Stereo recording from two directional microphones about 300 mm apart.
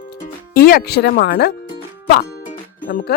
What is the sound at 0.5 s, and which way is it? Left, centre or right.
Speech, left.